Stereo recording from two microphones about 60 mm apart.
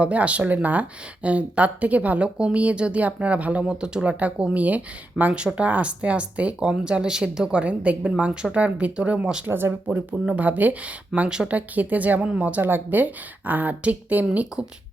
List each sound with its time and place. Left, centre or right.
0.0 s speech: right
9.5 s speech: right
11.3 s speech: centre
11.5 s speech: right